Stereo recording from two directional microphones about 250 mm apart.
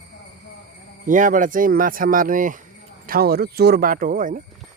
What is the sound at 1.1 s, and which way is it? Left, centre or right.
Speech, right.